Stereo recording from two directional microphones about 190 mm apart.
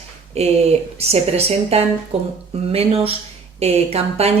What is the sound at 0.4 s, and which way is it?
A woman's voice, 35° right (ahead or behind).